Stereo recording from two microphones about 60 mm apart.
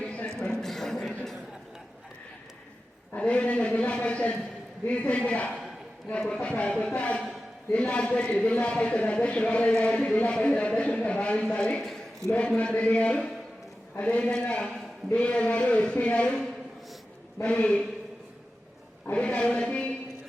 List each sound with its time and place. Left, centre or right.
0.0 s a sound: centre
3.1 s a man's voice: left
11.8 s a man's voice: centre
12.4 s a man's voice: centre
19.1 s a man's voice: centre